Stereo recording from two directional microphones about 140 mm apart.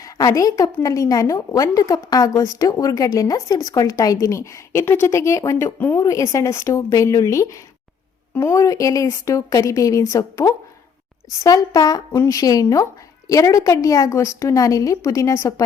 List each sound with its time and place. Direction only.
0.0 s a woman's voice: 25° left (ahead or behind)